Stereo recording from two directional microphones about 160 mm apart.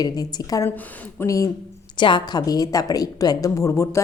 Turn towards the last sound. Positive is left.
turn(degrees=15)  # may be behind; listen again after turning